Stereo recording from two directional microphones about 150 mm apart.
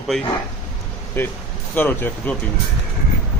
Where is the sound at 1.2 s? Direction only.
15° left (ahead or behind).